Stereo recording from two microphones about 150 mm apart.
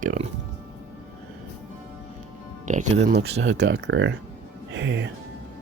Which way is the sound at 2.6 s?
55° right (ahead or behind).